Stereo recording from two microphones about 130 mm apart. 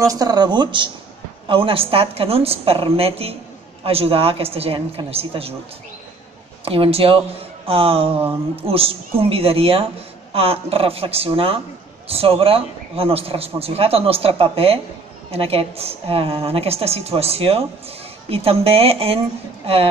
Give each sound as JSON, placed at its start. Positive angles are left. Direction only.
{"t": 0.0, "sound": "a man's voice", "side_deg": -30}
{"t": 6.6, "sound": "a man's voice", "side_deg": -45}